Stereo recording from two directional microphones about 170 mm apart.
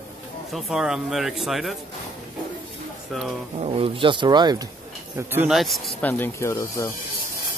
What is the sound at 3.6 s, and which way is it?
Speech, 35° right (ahead or behind).